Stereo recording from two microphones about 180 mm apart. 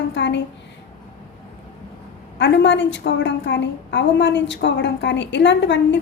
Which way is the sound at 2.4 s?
85° left.